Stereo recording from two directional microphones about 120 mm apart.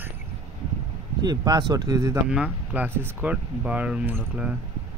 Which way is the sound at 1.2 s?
35° right (ahead or behind).